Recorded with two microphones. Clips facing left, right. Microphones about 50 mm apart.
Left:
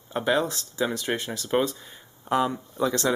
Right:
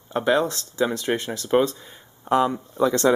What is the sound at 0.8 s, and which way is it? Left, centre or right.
Speech, centre.